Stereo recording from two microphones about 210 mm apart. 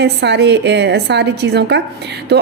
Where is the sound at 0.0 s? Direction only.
55° right (ahead or behind).